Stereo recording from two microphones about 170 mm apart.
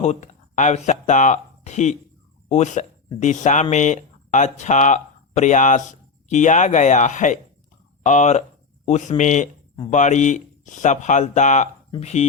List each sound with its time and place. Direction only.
0.0 s speech: 45° left (ahead or behind)